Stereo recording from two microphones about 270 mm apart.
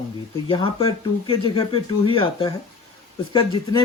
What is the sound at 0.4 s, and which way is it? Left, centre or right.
Speech, centre.